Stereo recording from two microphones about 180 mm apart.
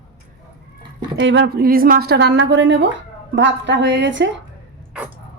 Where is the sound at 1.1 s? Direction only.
85° right.